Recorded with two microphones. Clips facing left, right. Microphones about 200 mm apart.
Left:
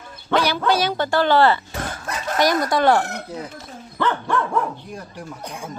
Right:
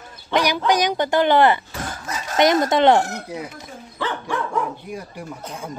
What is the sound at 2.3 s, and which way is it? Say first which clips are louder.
Speech: right 3 dB; 20° right (ahead or behind).